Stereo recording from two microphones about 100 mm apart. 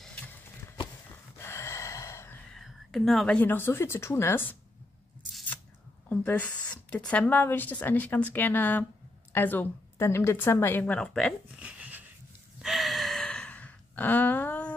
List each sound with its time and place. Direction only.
1.4 s gasp: 25° left (ahead or behind)
2.5 s a sound: centre (ahead or behind)
3.3 s a woman's voice: 20° left (ahead or behind)
6.0 s a woman's voice: 15° left (ahead or behind)
11.6 s wheeze: 15° right (ahead or behind)
12.6 s gasp: centre (ahead or behind); by 14.7 s 15° left (ahead or behind)